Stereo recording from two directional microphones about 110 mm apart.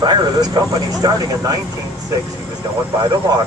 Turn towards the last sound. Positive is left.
turn(degrees=-35)  # may be behind; listen again after turning